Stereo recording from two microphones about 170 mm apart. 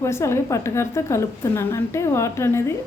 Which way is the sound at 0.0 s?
15° left (ahead or behind).